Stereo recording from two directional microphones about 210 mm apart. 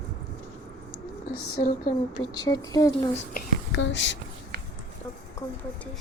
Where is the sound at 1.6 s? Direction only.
40° left (ahead or behind).